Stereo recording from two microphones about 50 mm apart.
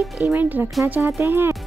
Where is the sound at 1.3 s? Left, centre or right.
Right.